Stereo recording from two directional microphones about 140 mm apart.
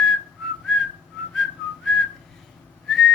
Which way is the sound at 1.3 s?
Centre (ahead or behind).